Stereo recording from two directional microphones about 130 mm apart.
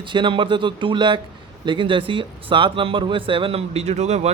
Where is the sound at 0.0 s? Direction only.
40° right (ahead or behind).